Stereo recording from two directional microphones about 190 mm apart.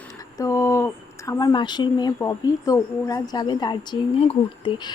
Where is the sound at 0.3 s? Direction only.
15° left (ahead or behind).